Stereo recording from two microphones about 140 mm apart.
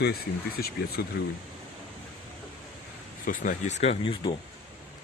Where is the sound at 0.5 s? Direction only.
90° left.